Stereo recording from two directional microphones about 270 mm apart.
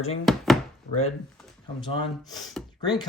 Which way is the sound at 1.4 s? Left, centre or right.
Centre.